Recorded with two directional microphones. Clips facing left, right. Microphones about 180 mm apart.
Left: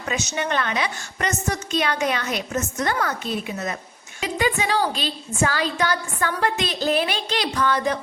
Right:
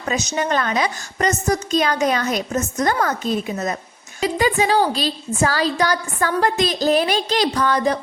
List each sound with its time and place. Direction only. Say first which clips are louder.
0.1 s a woman's voice: right 4 dB; 35° right (ahead or behind)